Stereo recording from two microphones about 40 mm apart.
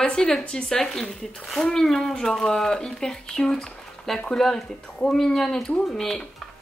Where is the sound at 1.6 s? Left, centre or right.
Centre.